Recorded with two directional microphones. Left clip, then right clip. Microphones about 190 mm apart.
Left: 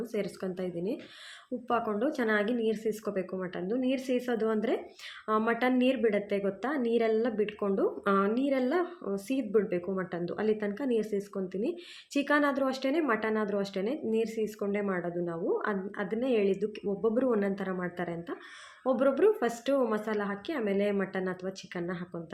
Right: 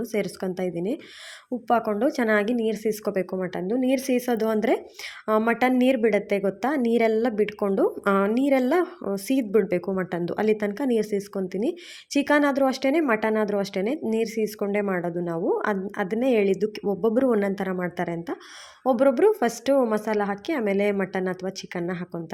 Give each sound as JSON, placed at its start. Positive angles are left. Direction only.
{"t": 0.0, "sound": "a woman's voice", "side_deg": -40}